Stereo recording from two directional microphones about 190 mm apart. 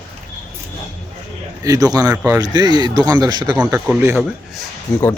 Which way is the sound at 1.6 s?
20° right (ahead or behind).